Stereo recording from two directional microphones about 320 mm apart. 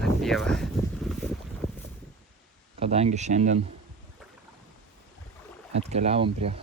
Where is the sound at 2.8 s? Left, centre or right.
Centre.